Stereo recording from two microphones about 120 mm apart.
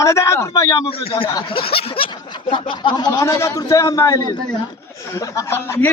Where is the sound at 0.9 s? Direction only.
50° left (ahead or behind).